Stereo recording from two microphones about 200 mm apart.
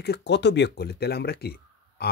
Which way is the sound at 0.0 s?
55° left (ahead or behind).